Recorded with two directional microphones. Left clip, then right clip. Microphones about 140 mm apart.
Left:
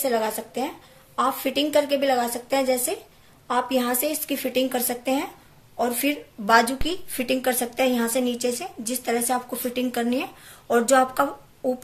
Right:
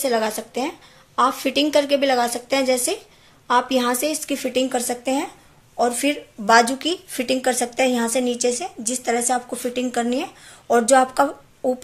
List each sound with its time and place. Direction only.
0.0 s a woman's voice: 45° right (ahead or behind)